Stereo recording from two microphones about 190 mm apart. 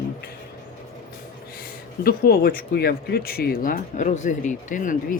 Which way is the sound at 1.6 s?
50° left (ahead or behind).